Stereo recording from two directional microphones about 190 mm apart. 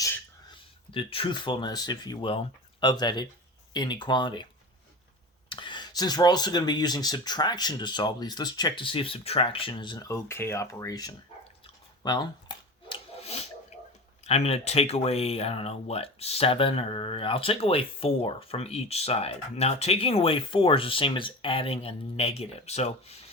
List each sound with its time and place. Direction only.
0.9 s speech: 30° left (ahead or behind)
5.5 s speech: 25° left (ahead or behind)
11.6 s rub: 20° left (ahead or behind)
14.3 s speech: 35° left (ahead or behind)